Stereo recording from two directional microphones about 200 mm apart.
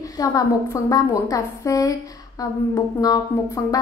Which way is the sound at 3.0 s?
20° left (ahead or behind).